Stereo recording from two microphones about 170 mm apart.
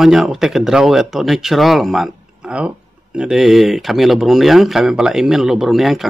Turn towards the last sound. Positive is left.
turn(degrees=0)  # may be behind; listen again after turning